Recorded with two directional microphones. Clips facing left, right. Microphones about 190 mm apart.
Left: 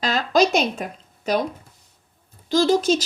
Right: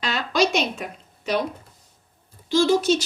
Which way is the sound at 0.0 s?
35° left (ahead or behind).